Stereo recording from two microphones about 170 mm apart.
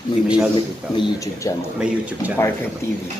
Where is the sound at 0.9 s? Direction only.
20° left (ahead or behind).